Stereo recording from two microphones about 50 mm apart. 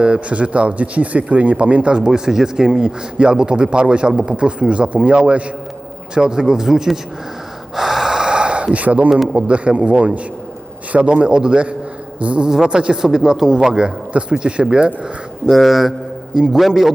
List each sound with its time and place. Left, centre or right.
0.0 s speech: right; by 7.0 s centre
7.8 s gasp: centre; by 9.0 s right
9.3 s speech: right
15.4 s speech: centre
16.3 s a man's voice: centre